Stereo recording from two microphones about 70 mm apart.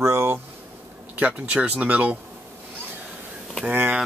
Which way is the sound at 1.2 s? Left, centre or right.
Centre.